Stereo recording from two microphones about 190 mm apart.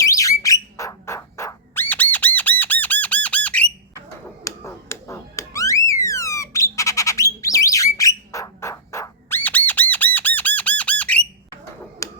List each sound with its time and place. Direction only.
0.0 s bird: 15° left (ahead or behind)
4.4 s alarm: 15° left (ahead or behind)